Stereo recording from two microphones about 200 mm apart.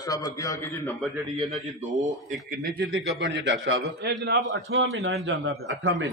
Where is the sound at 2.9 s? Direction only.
70° right (ahead or behind).